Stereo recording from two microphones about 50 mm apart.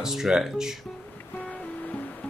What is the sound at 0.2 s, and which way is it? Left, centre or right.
Speech, centre.